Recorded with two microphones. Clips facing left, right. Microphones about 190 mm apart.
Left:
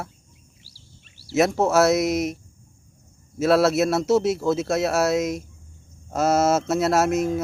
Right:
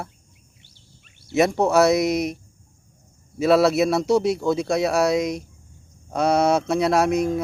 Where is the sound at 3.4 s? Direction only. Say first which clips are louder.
Right 1 dB; centre (ahead or behind).